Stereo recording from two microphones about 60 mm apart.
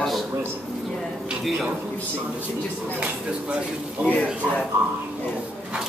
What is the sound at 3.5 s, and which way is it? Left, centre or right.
Speech, centre.